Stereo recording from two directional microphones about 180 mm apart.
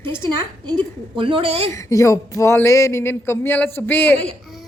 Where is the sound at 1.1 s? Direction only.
30° right (ahead or behind).